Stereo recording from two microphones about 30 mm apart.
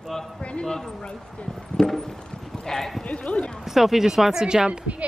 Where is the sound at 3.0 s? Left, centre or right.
Left.